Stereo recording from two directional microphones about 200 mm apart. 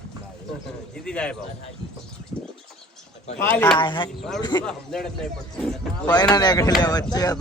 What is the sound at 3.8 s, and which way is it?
Speech, 25° left (ahead or behind).